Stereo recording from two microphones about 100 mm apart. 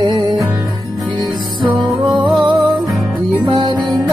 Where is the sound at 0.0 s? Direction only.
45° right (ahead or behind).